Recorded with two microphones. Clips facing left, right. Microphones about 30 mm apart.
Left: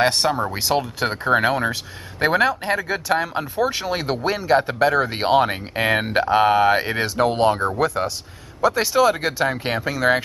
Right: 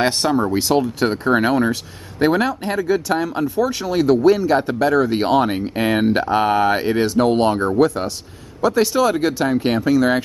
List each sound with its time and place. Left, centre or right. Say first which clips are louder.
0.0 s speech: right 1 dB; centre